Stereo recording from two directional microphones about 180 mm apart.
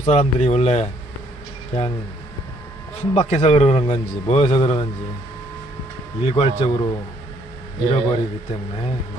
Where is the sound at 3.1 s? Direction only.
35° left (ahead or behind).